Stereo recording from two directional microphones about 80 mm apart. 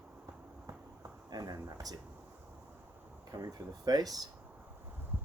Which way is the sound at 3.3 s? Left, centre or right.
Right.